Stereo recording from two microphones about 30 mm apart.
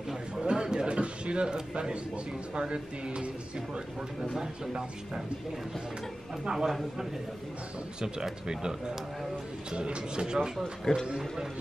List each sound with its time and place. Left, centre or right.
0.4 s a sound: right
2.5 s speech: right
4.2 s speech: centre
6.5 s speech: centre
8.0 s speech: right
10.9 s speech: left